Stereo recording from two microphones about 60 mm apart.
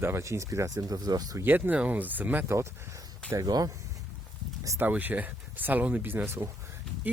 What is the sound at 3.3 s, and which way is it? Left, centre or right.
Speech, right.